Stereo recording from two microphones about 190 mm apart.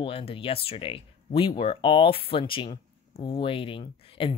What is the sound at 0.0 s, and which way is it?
Speech, 30° left (ahead or behind).